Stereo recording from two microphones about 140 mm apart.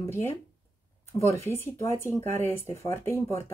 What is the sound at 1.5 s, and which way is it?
Speech, 20° left (ahead or behind).